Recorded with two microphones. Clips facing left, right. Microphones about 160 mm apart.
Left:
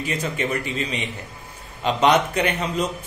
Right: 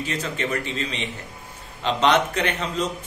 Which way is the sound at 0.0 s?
10° left (ahead or behind).